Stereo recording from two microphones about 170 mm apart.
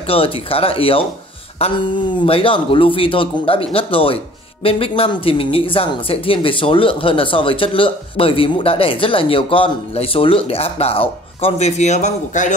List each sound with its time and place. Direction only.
0.0 s a woman's voice: 35° left (ahead or behind)